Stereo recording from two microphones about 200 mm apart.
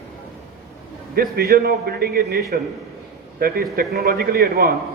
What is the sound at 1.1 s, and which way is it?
A man's voice, 50° right (ahead or behind).